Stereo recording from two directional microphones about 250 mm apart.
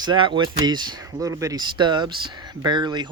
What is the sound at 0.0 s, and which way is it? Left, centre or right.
Speech, centre.